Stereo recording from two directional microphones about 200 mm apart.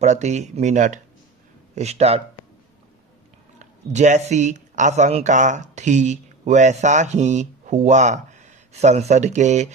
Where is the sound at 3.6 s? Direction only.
35° right (ahead or behind).